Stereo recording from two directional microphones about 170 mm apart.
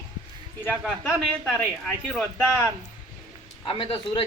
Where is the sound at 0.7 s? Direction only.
Centre (ahead or behind).